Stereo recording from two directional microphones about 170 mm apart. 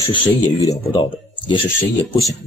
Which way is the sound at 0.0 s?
25° left (ahead or behind).